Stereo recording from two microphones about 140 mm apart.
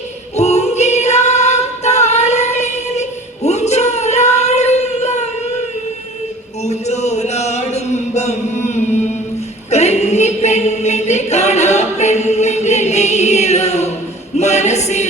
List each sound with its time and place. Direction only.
0.3 s singing: 55° left (ahead or behind)
6.7 s chant: 50° left (ahead or behind)
9.6 s choir: 50° left (ahead or behind)
14.3 s music: 55° left (ahead or behind)